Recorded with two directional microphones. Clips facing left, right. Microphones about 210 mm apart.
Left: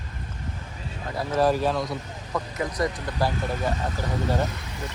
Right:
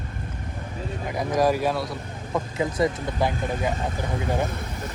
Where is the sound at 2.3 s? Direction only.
25° right (ahead or behind).